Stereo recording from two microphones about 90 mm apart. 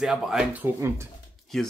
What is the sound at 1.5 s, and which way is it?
Speech, 5° left (ahead or behind).